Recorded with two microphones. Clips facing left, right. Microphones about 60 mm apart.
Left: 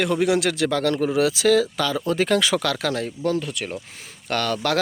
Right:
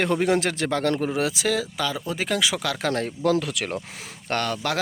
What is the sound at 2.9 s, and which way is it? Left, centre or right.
Speech, right.